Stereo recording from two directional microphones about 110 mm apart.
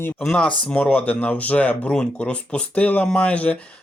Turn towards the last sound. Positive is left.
turn(degrees=10)  # may be behind; listen again after turning